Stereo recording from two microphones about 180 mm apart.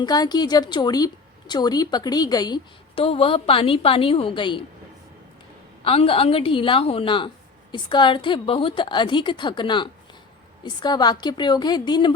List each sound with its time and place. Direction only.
0.0 s a woman's voice: 25° left (ahead or behind)
5.8 s a woman's voice: 30° left (ahead or behind)